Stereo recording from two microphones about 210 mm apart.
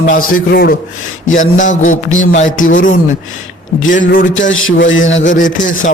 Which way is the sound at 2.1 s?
70° left (ahead or behind).